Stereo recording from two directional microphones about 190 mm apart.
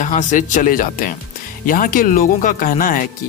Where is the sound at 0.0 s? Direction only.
40° left (ahead or behind).